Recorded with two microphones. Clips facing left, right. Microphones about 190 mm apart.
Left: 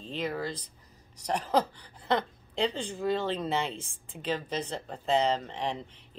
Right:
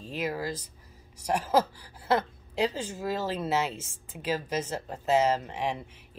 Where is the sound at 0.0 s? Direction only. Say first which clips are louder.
Right 1 dB; 10° right (ahead or behind).